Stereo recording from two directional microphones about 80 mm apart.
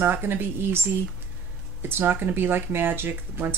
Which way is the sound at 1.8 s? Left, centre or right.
Right.